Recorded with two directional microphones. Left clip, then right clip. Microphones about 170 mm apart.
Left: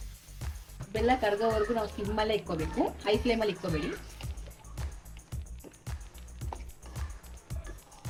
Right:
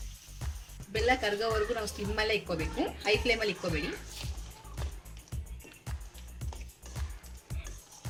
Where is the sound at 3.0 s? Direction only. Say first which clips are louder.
Right 2 dB; 40° left (ahead or behind).